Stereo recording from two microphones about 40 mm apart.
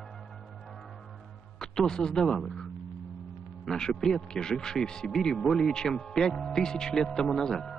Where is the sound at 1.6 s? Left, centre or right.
Centre.